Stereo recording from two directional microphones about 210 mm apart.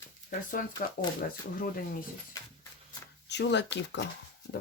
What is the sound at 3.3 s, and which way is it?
Speech, 55° left (ahead or behind).